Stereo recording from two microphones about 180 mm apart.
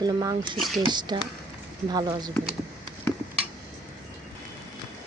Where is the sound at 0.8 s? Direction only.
25° right (ahead or behind).